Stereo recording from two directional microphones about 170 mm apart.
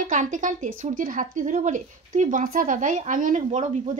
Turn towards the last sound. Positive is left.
turn(degrees=-45)  # may be behind; listen again after turning